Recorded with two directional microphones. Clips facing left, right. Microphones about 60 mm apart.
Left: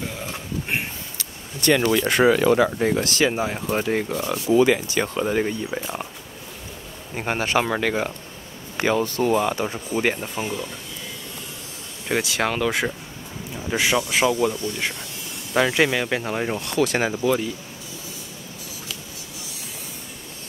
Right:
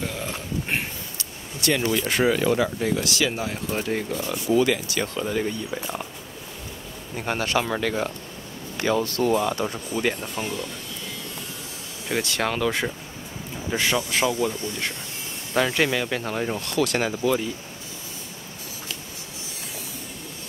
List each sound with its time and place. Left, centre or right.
1.7 s speech: left
2.8 s speech: left
7.2 s speech: left
8.9 s speech: left
12.1 s speech: centre
14.2 s speech: left
15.5 s speech: centre